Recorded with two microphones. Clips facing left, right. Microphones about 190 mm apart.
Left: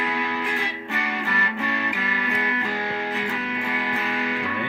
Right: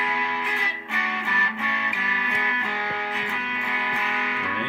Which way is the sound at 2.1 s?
40° left (ahead or behind).